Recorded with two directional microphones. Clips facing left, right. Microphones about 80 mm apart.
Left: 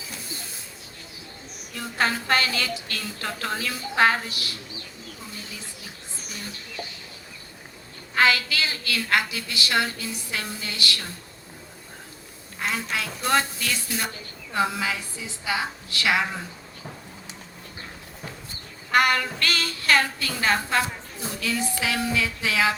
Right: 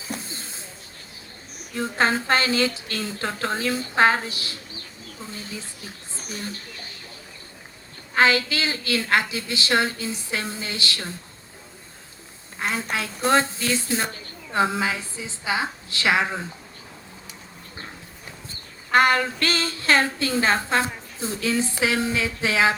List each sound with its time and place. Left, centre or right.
0.2 s a sound: right
1.7 s a woman's voice: right
6.1 s a sound: right
8.1 s a woman's voice: right
12.5 s a woman's voice: right
18.9 s a woman's voice: right